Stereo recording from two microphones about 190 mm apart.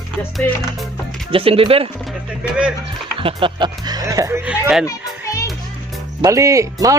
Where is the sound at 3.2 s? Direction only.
25° right (ahead or behind); by 4.8 s 5° right (ahead or behind).